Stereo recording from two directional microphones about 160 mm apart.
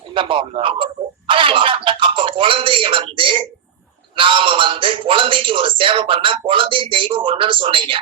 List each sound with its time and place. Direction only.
0.1 s speech: 30° right (ahead or behind)
1.3 s music: 30° right (ahead or behind)
4.1 s speech: 30° right (ahead or behind)